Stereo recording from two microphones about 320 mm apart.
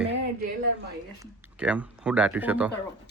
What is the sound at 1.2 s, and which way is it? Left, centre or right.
Speech, centre.